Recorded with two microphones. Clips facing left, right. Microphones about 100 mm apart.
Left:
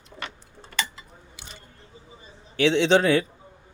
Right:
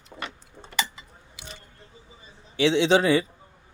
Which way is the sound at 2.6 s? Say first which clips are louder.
Left 1 dB; centre (ahead or behind).